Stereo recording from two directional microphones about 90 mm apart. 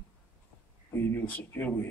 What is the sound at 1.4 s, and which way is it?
Speech, 20° left (ahead or behind).